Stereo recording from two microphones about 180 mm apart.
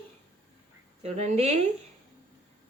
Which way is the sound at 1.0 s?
40° right (ahead or behind).